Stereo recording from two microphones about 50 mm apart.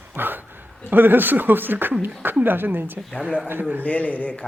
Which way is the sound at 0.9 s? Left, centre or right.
Right.